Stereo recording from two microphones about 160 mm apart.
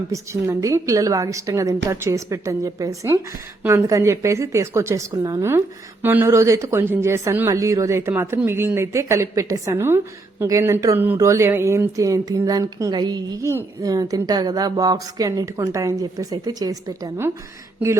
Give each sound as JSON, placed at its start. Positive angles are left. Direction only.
{"t": 0.1, "sound": "a woman's voice", "side_deg": -20}